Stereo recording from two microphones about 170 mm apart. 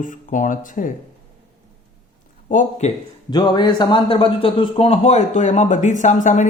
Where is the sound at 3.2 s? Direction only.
25° left (ahead or behind).